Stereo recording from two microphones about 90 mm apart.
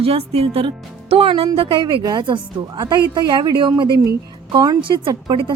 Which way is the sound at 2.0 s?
50° right (ahead or behind).